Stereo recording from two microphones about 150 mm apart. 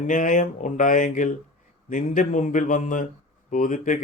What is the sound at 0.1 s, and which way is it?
Speech, 60° left (ahead or behind).